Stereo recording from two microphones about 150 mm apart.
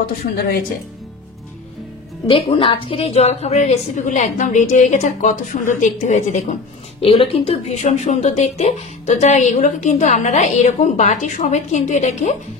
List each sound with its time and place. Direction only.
0.0 s a woman's voice: 90° left
2.2 s speech: 35° left (ahead or behind); by 6.5 s 50° left (ahead or behind)
7.0 s speech: 40° left (ahead or behind)